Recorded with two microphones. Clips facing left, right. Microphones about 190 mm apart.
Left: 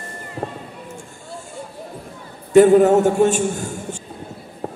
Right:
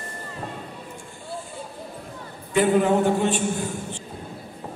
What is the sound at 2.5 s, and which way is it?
Speech, 45° left (ahead or behind).